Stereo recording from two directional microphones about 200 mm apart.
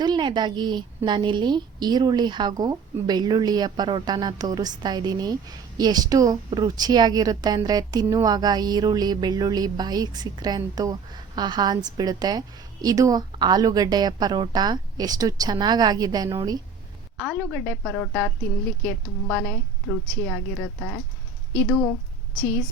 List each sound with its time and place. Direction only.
0.0 s a woman's voice: 20° right (ahead or behind)
17.2 s a woman's voice: 5° left (ahead or behind)